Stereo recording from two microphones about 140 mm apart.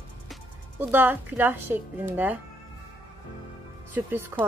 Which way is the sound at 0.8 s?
15° right (ahead or behind).